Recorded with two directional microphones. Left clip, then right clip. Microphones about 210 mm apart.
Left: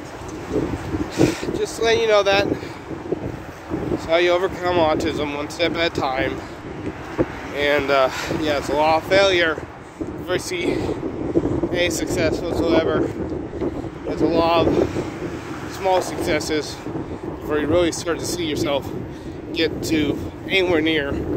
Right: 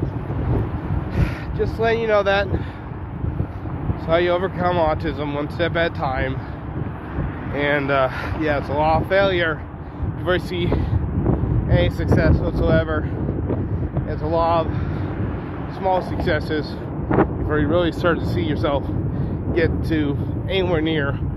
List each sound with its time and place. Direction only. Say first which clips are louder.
1.1 s speech: left 9 dB; 15° left (ahead or behind)
4.1 s speech: left 1 dB; 10° left (ahead or behind)
7.5 s speech: left 1 dB; 20° left (ahead or behind)
14.1 s speech: left 2 dB; 15° left (ahead or behind)
15.8 s speech: left 1 dB; 20° left (ahead or behind)